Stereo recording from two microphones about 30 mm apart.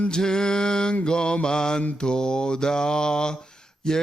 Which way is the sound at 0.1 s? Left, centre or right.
Left.